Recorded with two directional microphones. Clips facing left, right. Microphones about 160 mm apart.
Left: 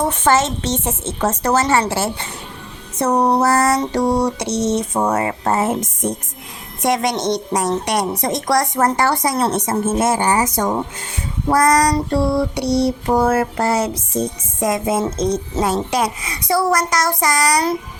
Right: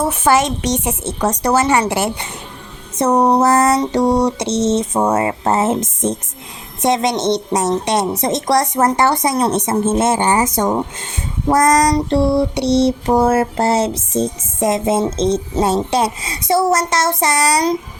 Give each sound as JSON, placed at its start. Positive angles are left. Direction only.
{"t": 0.0, "sound": "a woman's voice", "side_deg": -10}
{"t": 3.0, "sound": "child singing", "side_deg": -20}